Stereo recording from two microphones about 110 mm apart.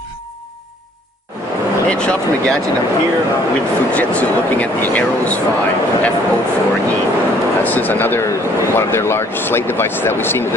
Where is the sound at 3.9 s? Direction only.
15° left (ahead or behind).